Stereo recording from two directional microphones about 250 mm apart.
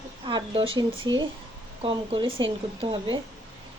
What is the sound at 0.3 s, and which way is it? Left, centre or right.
Speech, right.